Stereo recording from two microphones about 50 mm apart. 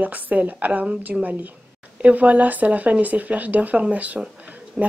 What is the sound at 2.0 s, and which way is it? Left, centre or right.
Speech, right.